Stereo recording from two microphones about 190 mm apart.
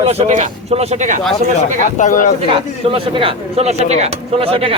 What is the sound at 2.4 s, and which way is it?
Speech, 30° right (ahead or behind).